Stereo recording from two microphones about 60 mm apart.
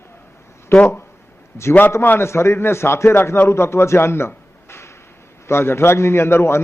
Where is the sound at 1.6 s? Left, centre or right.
Left.